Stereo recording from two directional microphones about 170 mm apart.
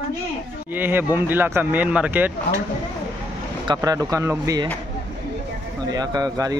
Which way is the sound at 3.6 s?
20° right (ahead or behind).